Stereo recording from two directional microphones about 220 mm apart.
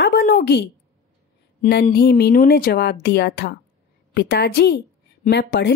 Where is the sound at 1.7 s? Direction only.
45° left (ahead or behind).